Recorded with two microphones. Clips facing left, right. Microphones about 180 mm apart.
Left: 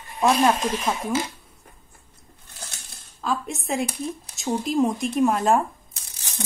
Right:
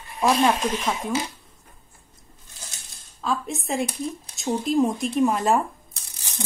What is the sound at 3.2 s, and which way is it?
A woman's voice, centre (ahead or behind).